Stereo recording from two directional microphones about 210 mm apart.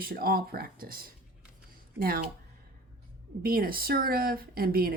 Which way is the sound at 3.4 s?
45° right (ahead or behind).